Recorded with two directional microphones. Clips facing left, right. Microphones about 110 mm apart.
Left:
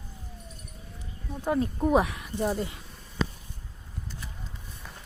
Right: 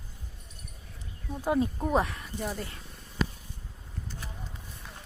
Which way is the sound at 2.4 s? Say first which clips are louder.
Left 7 dB; 25° left (ahead or behind).